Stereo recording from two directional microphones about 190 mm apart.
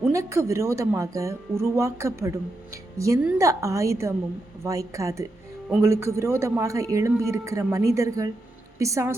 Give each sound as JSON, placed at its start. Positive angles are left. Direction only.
{"t": 0.0, "sound": "a man's voice", "side_deg": -15}